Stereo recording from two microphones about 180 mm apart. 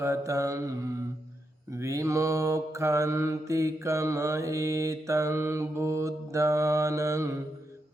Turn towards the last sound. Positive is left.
turn(degrees=-15)  # may be behind; listen again after turning